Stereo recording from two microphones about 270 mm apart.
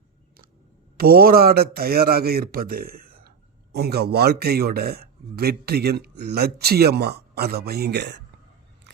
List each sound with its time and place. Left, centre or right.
0.9 s a man's voice: right